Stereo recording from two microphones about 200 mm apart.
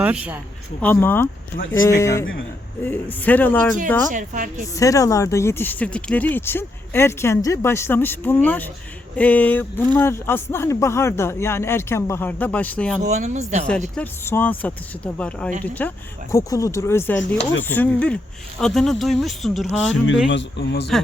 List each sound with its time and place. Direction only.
0.0 s speech: 5° right (ahead or behind)
0.8 s speech: 10° left (ahead or behind)
4.1 s speech: 40° right (ahead or behind)
4.7 s speech: 15° left (ahead or behind)
13.0 s speech: 35° right (ahead or behind)
13.9 s speech: 10° left (ahead or behind)
17.2 s speech: 65° left (ahead or behind)
17.7 s speech: 10° left (ahead or behind)
20.3 s speech: 60° left (ahead or behind)